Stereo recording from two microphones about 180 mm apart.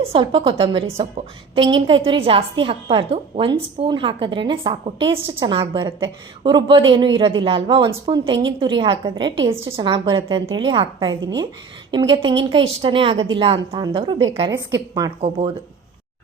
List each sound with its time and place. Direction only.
0.0 s a woman's voice: 30° right (ahead or behind)
15.2 s speech: 35° right (ahead or behind)